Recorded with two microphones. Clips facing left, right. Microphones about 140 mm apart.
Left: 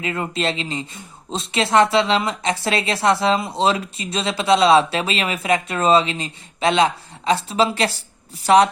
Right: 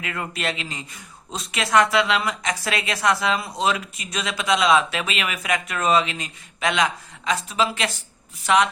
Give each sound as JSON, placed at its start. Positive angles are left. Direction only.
{"t": 0.0, "sound": "speech", "side_deg": 25}